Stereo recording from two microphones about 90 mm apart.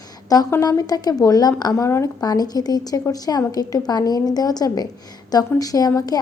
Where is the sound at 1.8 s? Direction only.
30° left (ahead or behind).